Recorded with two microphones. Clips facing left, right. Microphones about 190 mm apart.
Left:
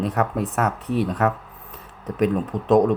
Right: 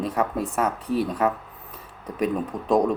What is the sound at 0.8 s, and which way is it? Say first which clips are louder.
Speech: left 1 dB; 35° right (ahead or behind).